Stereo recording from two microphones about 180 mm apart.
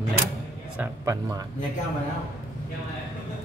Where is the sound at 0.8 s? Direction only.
15° right (ahead or behind).